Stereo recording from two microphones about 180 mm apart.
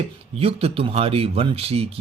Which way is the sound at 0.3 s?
35° right (ahead or behind).